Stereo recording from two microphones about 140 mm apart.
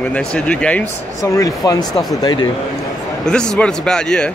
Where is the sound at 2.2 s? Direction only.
30° left (ahead or behind).